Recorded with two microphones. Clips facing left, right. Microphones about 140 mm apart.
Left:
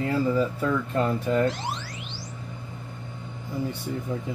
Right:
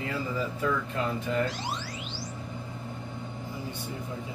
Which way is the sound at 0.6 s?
40° left (ahead or behind).